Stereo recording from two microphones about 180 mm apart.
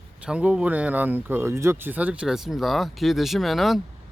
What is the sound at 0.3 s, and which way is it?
Speech, 5° right (ahead or behind).